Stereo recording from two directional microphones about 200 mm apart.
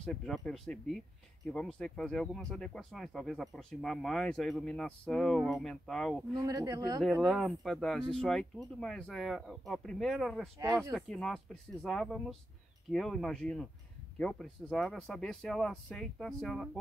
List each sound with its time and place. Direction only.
0.0 s speech: 5° left (ahead or behind)
6.3 s speech: 15° right (ahead or behind)
7.0 s speech: centre (ahead or behind)